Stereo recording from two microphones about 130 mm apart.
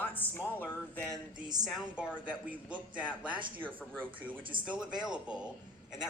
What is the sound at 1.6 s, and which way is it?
A woman's voice, 5° right (ahead or behind).